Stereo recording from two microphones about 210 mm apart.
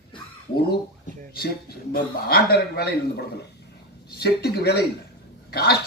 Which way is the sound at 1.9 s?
45° left (ahead or behind).